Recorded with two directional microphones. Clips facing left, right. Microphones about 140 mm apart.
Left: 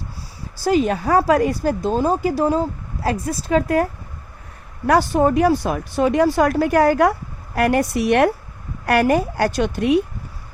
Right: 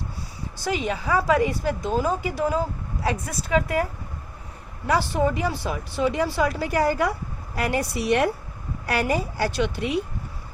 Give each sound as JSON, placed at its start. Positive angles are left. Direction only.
{"t": 0.6, "sound": "speech", "side_deg": 40}
{"t": 4.9, "sound": "speech", "side_deg": 50}